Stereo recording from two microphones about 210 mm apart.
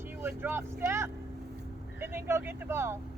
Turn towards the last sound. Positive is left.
turn(degrees=-10)  # may be behind; listen again after turning